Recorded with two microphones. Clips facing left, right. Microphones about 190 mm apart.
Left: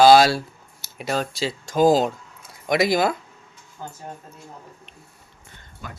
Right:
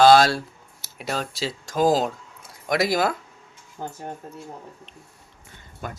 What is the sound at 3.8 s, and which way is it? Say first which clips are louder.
Speech: right 3 dB; 55° right (ahead or behind).